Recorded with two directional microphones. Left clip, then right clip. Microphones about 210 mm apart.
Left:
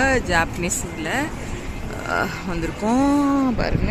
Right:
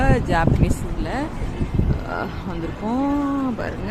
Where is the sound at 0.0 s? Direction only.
Centre (ahead or behind).